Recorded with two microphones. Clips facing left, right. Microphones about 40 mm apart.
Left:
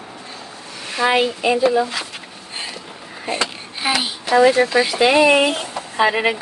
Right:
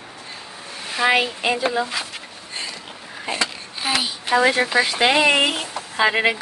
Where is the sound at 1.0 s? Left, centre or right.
Right.